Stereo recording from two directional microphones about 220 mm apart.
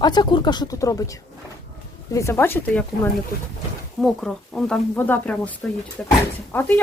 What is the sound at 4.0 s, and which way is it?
Speech, centre (ahead or behind).